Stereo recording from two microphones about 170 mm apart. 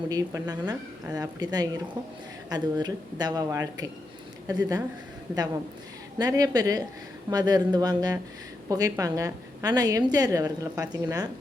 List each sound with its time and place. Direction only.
0.1 s a woman's voice: 20° right (ahead or behind)
6.1 s a woman's voice: 20° right (ahead or behind)